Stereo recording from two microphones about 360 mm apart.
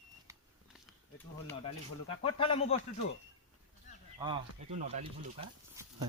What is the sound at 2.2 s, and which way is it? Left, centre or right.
Speech, centre.